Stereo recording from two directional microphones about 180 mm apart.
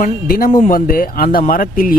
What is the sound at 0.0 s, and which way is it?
Speech, 55° left (ahead or behind).